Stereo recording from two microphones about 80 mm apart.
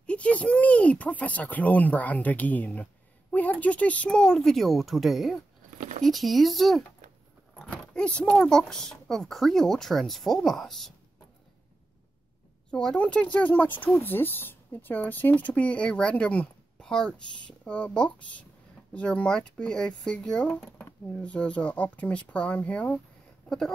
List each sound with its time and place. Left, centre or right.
0.0 s speech: centre
7.6 s speech: centre
12.7 s speech: centre